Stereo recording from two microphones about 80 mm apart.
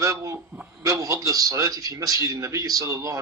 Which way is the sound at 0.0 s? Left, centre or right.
Right.